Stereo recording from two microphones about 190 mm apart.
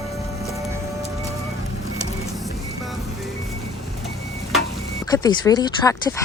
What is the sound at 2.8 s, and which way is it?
Music, centre (ahead or behind).